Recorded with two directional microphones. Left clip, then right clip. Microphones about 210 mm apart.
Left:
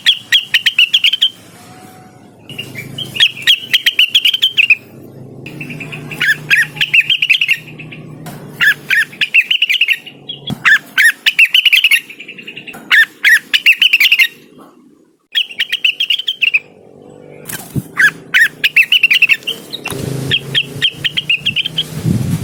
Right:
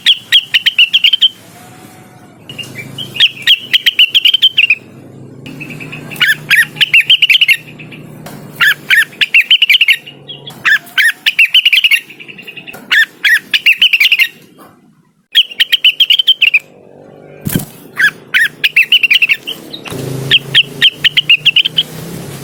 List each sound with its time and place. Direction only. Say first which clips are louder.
0.0 s bird: right 3 dB; 5° left (ahead or behind)
3.2 s bird: right 2 dB; centre (ahead or behind)
6.1 s bird: right 2 dB; 10° right (ahead or behind)
10.6 s bird: left 1 dB; 10° left (ahead or behind)
15.3 s bird: right 6 dB; 10° right (ahead or behind)
17.9 s bird: even; 5° left (ahead or behind)
19.9 s a sound: left 1 dB; 35° left (ahead or behind)
20.2 s vehicle: right 7 dB; 15° right (ahead or behind)